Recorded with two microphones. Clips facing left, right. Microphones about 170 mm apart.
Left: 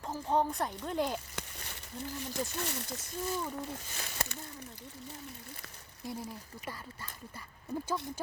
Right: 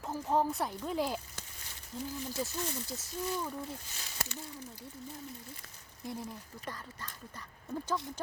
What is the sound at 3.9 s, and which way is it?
Speech, 60° left (ahead or behind).